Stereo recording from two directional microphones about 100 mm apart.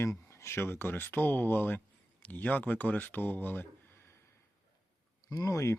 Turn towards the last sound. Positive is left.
turn(degrees=30)  # may be behind; listen again after turning